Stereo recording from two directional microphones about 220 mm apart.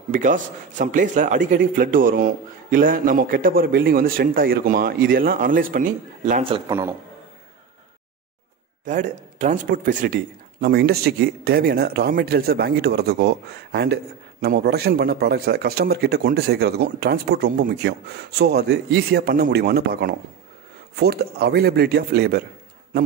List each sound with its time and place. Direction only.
0.1 s a man's voice: 35° right (ahead or behind)
6.7 s a man's voice: 15° right (ahead or behind)
8.8 s a man's voice: 35° right (ahead or behind)